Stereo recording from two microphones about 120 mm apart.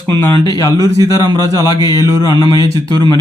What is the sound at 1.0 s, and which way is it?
Speech, 30° right (ahead or behind).